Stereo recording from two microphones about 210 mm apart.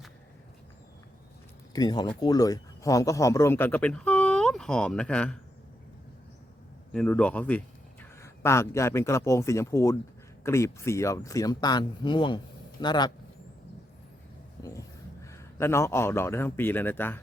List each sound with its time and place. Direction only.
1.7 s a man's voice: 20° left (ahead or behind)
6.9 s speech: 5° left (ahead or behind); by 13.1 s 20° left (ahead or behind)
15.2 s a man's voice: 15° left (ahead or behind)